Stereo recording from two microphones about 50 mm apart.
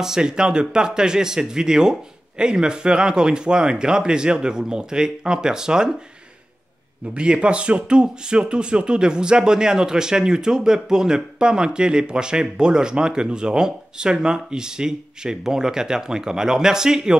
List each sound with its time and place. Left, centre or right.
0.0 s speech: centre
7.2 s speech: right